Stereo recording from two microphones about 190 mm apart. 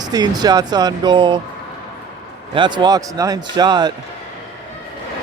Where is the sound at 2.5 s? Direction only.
25° right (ahead or behind).